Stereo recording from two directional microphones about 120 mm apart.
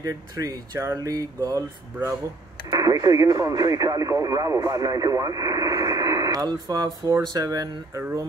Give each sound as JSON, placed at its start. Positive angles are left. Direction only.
{"t": 0.0, "sound": "speech", "side_deg": -30}
{"t": 2.7, "sound": "speech", "side_deg": -30}